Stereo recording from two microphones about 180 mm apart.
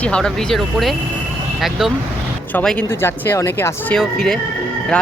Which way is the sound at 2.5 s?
10° left (ahead or behind).